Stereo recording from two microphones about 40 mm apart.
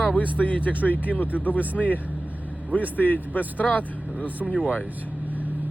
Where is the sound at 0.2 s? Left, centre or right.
Left.